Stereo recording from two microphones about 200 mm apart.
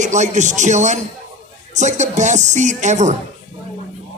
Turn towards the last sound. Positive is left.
turn(degrees=-35)  # may be behind; listen again after turning